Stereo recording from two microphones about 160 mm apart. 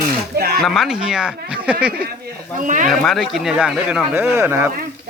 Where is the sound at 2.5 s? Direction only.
50° right (ahead or behind).